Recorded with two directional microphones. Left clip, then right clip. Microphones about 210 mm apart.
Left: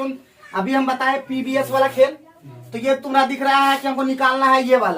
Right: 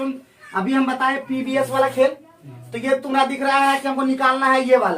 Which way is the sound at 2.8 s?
15° right (ahead or behind).